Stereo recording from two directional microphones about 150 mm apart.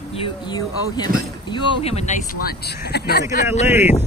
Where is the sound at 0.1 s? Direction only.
35° left (ahead or behind).